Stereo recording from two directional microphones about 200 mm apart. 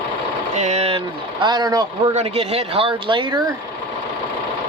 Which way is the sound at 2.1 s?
30° right (ahead or behind).